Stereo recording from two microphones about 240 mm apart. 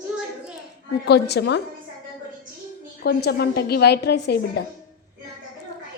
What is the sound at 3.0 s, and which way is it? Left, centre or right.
A woman's voice, left.